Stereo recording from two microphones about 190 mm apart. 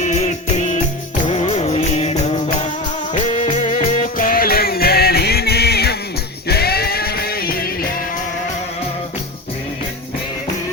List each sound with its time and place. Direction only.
0.0 s music: 40° left (ahead or behind)